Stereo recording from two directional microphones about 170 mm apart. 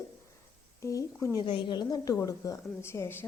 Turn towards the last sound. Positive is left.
turn(degrees=15)  # may be behind; listen again after turning